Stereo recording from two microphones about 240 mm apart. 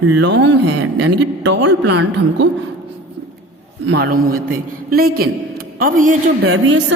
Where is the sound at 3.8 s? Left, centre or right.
Right.